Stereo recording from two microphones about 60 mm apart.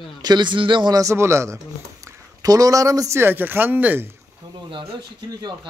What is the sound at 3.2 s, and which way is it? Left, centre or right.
Speech, right.